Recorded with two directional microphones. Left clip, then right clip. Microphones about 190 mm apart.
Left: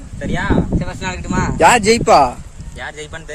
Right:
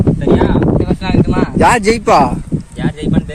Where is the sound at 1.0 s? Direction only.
15° left (ahead or behind).